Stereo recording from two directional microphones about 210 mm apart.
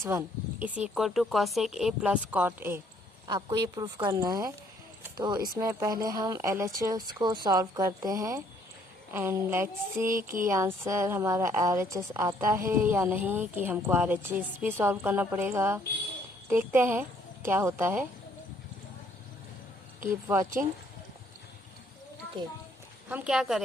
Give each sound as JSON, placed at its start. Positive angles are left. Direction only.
{"t": 0.0, "sound": "a woman's voice", "side_deg": -10}
{"t": 20.2, "sound": "a woman's voice", "side_deg": -15}
{"t": 23.0, "sound": "speech", "side_deg": -5}